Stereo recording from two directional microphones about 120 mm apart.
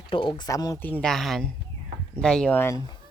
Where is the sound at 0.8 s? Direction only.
15° left (ahead or behind).